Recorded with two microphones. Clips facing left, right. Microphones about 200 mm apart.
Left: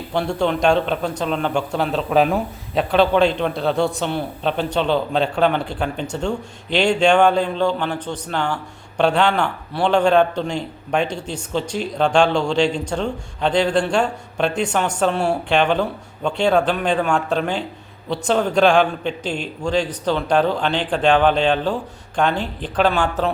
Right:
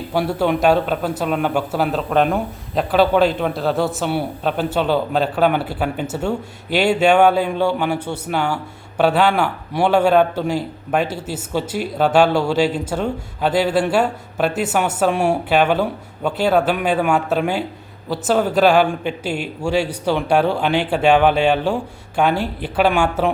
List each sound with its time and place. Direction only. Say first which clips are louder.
0.1 s a man's voice: right 2 dB; 5° right (ahead or behind)